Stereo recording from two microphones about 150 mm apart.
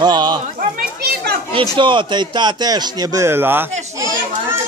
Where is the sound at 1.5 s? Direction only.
35° right (ahead or behind); by 3.6 s 15° right (ahead or behind).